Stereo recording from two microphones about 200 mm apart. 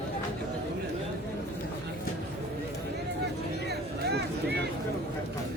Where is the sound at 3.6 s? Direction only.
55° right (ahead or behind).